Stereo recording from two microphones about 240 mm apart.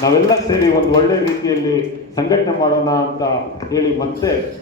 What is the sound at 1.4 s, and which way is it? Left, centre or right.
Speech, centre.